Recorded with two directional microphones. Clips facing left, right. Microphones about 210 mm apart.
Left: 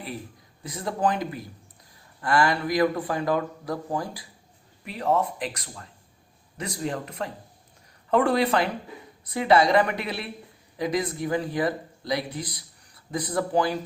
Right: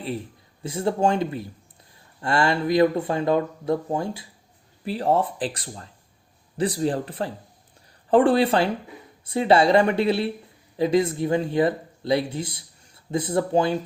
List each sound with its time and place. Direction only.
0.6 s speech: 30° right (ahead or behind)